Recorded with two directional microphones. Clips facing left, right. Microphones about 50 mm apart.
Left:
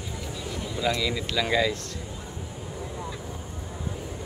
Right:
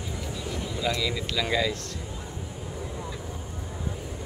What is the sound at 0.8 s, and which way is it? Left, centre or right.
Speech, left.